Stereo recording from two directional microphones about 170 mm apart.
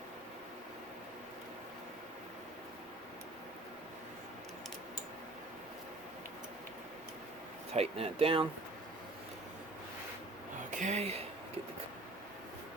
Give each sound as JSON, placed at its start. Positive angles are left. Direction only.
{"t": 7.7, "sound": "speech", "side_deg": -35}
{"t": 10.7, "sound": "speech", "side_deg": -45}